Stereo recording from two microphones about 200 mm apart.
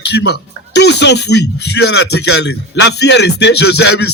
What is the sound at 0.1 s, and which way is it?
Speech, 60° left (ahead or behind).